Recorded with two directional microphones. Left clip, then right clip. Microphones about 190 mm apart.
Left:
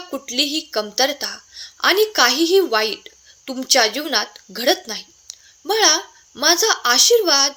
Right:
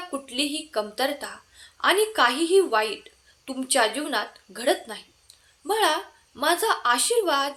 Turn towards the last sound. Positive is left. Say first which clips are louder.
# left 8 dB
turn(degrees=40)  # may be behind; listen again after turning